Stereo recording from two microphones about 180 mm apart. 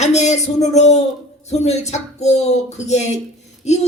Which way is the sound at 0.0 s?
40° left (ahead or behind).